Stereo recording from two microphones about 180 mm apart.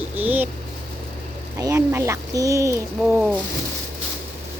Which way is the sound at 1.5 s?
15° right (ahead or behind).